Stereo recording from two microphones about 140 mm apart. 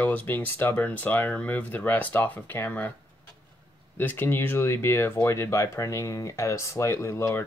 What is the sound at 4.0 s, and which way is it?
Speech, 15° left (ahead or behind).